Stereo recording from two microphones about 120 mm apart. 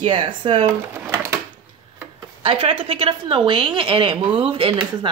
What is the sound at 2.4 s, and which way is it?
A woman's voice, 50° right (ahead or behind).